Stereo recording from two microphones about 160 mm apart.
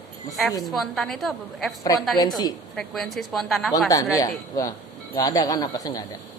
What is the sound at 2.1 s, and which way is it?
Speech, 25° left (ahead or behind).